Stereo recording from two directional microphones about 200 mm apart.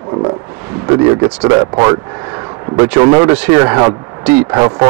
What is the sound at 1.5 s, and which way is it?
A man's voice, 15° right (ahead or behind).